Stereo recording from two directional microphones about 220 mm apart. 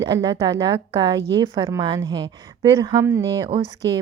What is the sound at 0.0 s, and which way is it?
A woman's voice, 20° right (ahead or behind).